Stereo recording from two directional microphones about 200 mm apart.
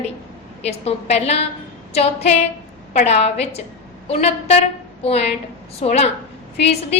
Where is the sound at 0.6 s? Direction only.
30° left (ahead or behind).